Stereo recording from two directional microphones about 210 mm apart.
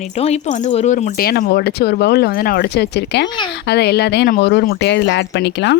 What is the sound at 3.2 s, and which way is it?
Speech, 20° left (ahead or behind).